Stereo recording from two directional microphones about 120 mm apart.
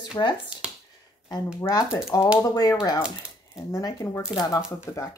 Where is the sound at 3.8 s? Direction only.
30° left (ahead or behind).